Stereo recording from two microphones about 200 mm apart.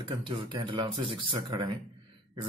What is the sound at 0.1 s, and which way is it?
Speech, 25° right (ahead or behind).